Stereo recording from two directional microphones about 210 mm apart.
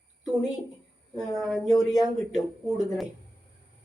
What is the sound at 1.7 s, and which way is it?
Speech, 15° left (ahead or behind).